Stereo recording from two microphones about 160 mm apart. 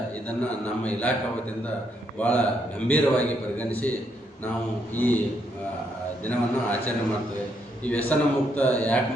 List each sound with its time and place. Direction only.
0.3 s a man's voice: 10° left (ahead or behind)
2.1 s a man's voice: 10° left (ahead or behind)
4.9 s a man's voice: 10° left (ahead or behind)
6.2 s a man's voice: 10° left (ahead or behind)